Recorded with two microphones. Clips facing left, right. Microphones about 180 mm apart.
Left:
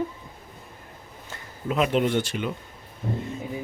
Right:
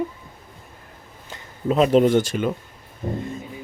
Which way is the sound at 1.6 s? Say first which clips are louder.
Right 7 dB; 35° right (ahead or behind).